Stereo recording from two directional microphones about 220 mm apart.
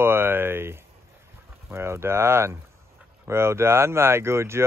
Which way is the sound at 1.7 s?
10° right (ahead or behind).